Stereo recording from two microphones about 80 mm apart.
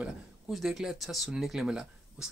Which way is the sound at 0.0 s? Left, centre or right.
Centre.